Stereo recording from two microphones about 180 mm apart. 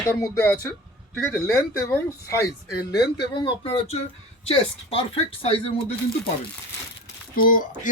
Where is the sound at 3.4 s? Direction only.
30° left (ahead or behind).